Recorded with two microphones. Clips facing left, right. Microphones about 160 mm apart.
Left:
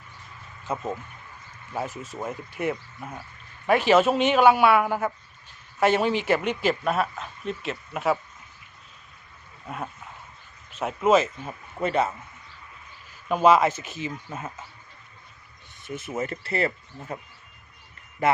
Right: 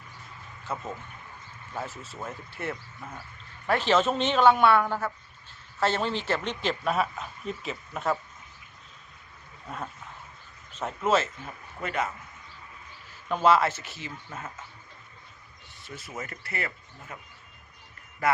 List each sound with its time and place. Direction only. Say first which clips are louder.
0.7 s speech: left 5 dB; 20° left (ahead or behind)
9.6 s speech: left 3 dB; 10° left (ahead or behind); by 12.0 s 25° left (ahead or behind)
13.2 s speech: left 4 dB; 15° left (ahead or behind)
15.8 s speech: left 9 dB; 20° left (ahead or behind)
18.2 s speech: left 3 dB; 25° left (ahead or behind)